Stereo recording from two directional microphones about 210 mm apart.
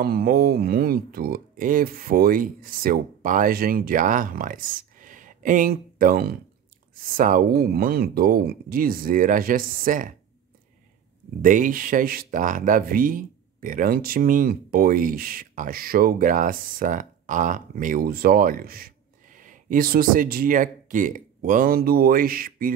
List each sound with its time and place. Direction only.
0.0 s speech: 45° right (ahead or behind)
11.4 s speech: 40° right (ahead or behind)